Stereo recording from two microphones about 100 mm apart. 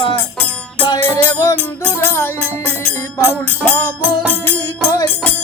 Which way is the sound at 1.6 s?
20° left (ahead or behind).